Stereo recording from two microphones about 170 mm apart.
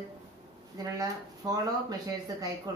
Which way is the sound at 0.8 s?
20° right (ahead or behind).